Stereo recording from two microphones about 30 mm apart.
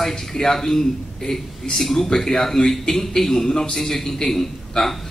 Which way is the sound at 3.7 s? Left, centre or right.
Centre.